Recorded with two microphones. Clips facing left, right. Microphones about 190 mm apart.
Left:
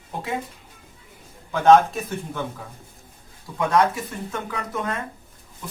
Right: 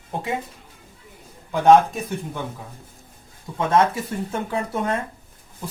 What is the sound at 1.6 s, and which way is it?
Speech, 15° right (ahead or behind).